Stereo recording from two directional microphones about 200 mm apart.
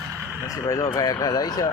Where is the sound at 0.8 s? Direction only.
20° left (ahead or behind).